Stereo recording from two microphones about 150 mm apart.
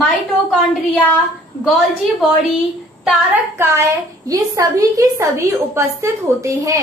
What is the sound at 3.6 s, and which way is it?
A woman's voice, 20° right (ahead or behind).